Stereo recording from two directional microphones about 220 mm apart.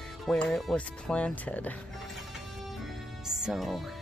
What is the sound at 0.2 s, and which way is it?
Speech, centre (ahead or behind).